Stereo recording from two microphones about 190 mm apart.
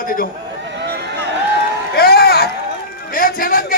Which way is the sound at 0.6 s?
65° right (ahead or behind).